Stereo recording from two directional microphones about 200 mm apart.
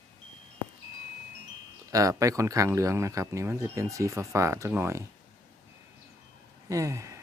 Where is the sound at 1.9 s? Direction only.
15° right (ahead or behind).